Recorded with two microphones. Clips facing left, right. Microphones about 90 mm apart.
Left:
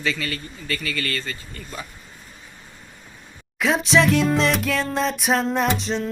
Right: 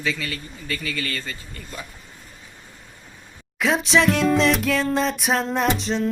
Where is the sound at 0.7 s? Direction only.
15° right (ahead or behind).